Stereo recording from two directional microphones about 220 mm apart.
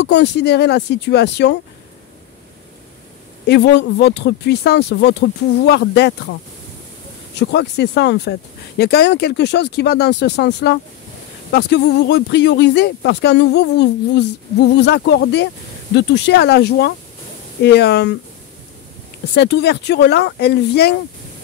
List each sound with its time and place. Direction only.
0.0 s speech: 50° left (ahead or behind)
3.4 s speech: 50° left (ahead or behind)
7.3 s speech: 50° left (ahead or behind)
19.3 s speech: 50° left (ahead or behind)